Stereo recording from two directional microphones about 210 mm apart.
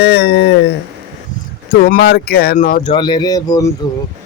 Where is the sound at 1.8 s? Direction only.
50° left (ahead or behind).